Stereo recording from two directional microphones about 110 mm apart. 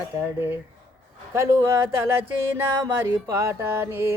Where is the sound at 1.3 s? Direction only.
25° right (ahead or behind).